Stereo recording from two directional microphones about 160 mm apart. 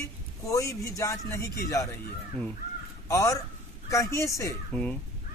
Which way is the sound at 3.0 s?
20° left (ahead or behind).